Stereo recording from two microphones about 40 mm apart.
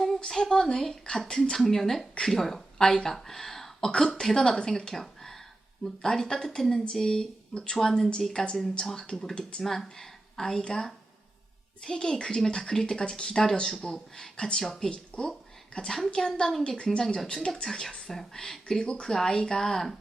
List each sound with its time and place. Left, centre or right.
0.2 s speech: centre
9.1 s speech: left
9.6 s a woman's voice: centre
15.9 s speech: centre
16.7 s speech: left
17.2 s speech: centre
18.8 s speech: left